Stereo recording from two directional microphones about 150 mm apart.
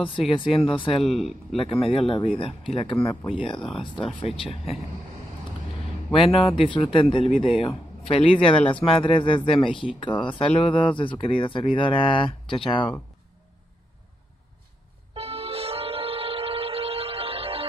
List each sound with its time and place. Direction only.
0.4 s speech: 40° left (ahead or behind)
1.0 s speech: centre (ahead or behind)
1.6 s speech: 40° left (ahead or behind)
6.1 s speech: 40° left (ahead or behind)
15.1 s music: 40° right (ahead or behind)